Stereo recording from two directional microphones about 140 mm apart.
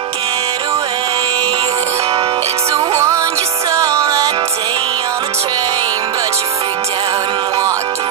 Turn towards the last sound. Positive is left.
turn(degrees=-20)  # may be behind; listen again after turning